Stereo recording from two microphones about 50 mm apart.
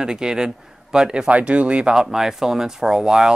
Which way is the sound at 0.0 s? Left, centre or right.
Centre.